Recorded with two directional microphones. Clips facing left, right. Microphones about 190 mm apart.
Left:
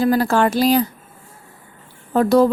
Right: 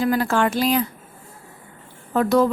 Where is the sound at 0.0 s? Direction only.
35° left (ahead or behind).